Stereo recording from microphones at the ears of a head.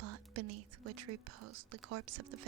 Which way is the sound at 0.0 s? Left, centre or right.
Right.